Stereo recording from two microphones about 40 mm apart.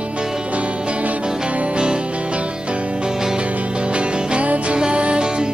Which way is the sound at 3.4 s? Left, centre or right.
Right.